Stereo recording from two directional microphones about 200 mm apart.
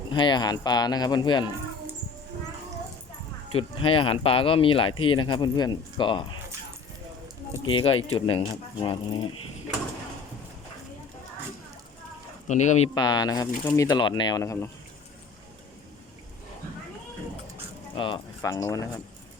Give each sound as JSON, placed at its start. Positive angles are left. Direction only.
{"t": 0.1, "sound": "speech", "side_deg": 25}
{"t": 3.8, "sound": "speech", "side_deg": 25}
{"t": 7.6, "sound": "speech", "side_deg": 25}
{"t": 12.5, "sound": "speech", "side_deg": 35}
{"t": 12.9, "sound": "speech", "side_deg": 20}
{"t": 17.9, "sound": "speech", "side_deg": 25}